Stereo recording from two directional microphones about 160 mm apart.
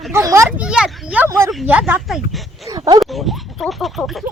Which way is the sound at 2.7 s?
25° right (ahead or behind).